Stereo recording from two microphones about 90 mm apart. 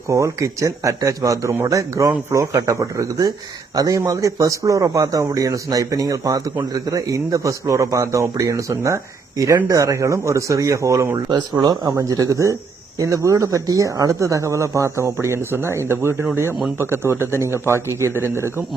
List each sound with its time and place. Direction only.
0.1 s speech: 35° right (ahead or behind)
11.6 s a man's voice: 50° right (ahead or behind); by 18.6 s 30° right (ahead or behind)